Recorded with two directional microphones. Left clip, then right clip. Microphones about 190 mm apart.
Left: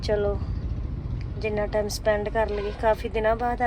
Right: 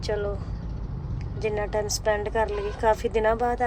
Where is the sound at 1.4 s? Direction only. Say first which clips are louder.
Left 1 dB; 15° right (ahead or behind).